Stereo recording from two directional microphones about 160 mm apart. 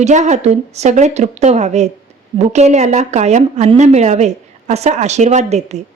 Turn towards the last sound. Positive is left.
turn(degrees=-45)  # may be behind; listen again after turning